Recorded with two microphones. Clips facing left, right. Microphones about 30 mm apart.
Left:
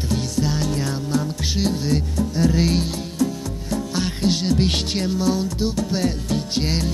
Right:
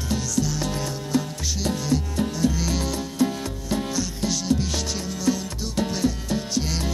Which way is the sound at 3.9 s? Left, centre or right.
Left.